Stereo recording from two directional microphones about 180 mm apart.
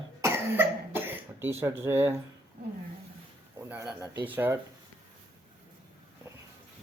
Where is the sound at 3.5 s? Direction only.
15° right (ahead or behind).